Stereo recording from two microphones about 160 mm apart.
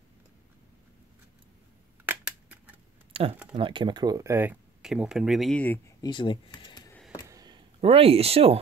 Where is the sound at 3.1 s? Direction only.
35° right (ahead or behind).